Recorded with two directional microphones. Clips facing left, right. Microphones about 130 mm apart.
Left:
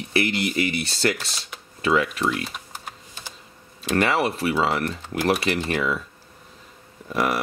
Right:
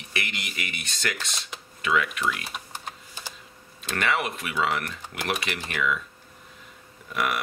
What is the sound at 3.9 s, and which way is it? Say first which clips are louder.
Speech: left 6 dB; 35° left (ahead or behind).